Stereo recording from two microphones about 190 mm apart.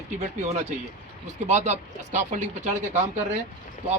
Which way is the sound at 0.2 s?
35° right (ahead or behind).